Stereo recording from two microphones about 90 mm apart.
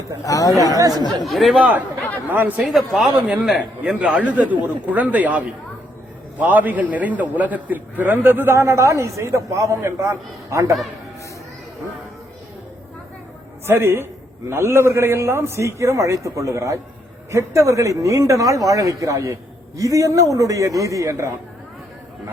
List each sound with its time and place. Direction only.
0.3 s speech: 40° left (ahead or behind)
0.6 s speech: 40° right (ahead or behind)
1.2 s speech: centre (ahead or behind)
2.3 s a man's voice: 20° right (ahead or behind)
2.6 s speech: centre (ahead or behind)
6.4 s a man's voice: 20° right (ahead or behind); by 10.8 s 35° right (ahead or behind)
13.7 s a man's voice: 25° right (ahead or behind)